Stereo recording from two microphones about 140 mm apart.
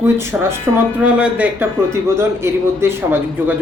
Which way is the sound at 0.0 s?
20° right (ahead or behind).